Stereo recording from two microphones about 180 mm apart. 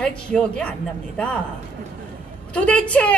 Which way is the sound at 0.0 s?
5° left (ahead or behind).